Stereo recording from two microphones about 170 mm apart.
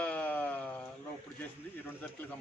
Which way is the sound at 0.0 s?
10° left (ahead or behind).